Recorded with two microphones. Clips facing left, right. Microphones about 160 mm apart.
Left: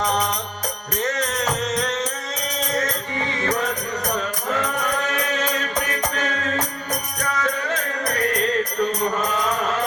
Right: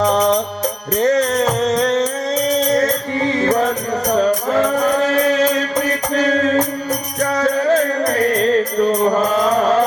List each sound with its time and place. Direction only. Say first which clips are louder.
0.9 s music: right 10 dB; 35° right (ahead or behind)